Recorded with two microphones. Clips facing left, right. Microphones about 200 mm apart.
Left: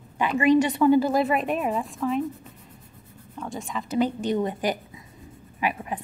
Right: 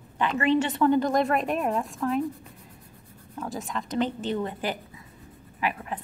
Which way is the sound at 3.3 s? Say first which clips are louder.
Even; centre (ahead or behind).